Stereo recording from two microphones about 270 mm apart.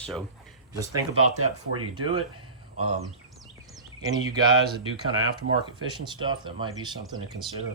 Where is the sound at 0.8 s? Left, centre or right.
Centre.